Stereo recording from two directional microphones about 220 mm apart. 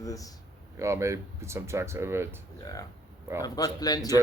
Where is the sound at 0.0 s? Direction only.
15° left (ahead or behind).